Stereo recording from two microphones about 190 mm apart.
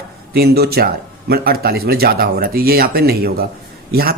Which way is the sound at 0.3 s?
55° right (ahead or behind).